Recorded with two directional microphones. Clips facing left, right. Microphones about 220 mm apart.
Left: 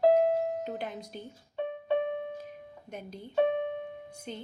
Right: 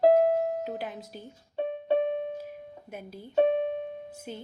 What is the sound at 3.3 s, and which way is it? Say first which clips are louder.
Music: right 3 dB; 30° right (ahead or behind).